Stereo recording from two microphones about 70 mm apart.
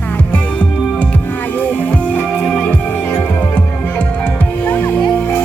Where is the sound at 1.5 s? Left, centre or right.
Left.